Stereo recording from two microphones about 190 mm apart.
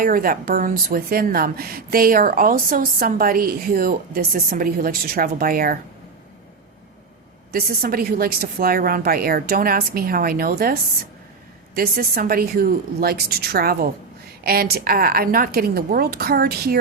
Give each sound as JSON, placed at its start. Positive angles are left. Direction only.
{"t": 0.0, "sound": "a woman's voice", "side_deg": -45}
{"t": 7.5, "sound": "a woman's voice", "side_deg": -50}